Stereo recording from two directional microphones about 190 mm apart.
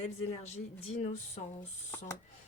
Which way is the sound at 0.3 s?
35° left (ahead or behind).